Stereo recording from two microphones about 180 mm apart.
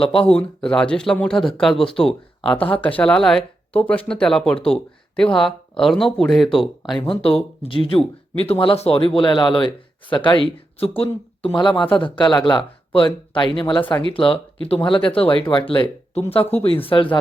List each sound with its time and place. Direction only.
0.0 s speech: 30° left (ahead or behind)
0.3 s speech: 5° left (ahead or behind)
7.1 s speech: 30° left (ahead or behind)